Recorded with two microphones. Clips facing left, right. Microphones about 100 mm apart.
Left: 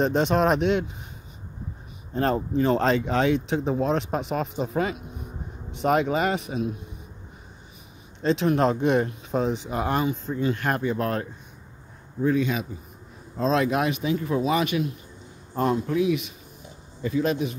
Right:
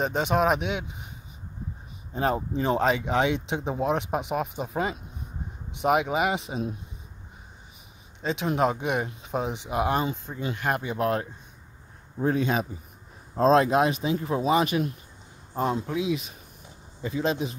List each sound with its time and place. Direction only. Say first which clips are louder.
0.0 s speech: left 3 dB; 5° right (ahead or behind)
2.1 s speech: left 3 dB; 10° right (ahead or behind)
8.2 s speech: left 4 dB; 10° right (ahead or behind)
12.2 s speech: left 1 dB; 40° right (ahead or behind)
15.5 s speech: left 3 dB; 20° right (ahead or behind)